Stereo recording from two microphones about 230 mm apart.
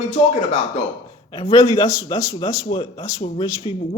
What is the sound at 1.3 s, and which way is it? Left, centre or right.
Speech, left.